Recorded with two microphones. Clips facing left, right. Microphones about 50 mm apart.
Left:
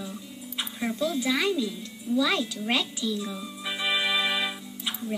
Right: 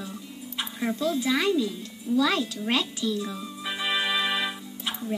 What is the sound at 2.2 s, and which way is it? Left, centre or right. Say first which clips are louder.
Music: right 1 dB; centre.